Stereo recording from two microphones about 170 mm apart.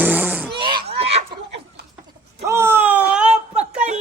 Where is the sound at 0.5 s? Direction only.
30° right (ahead or behind).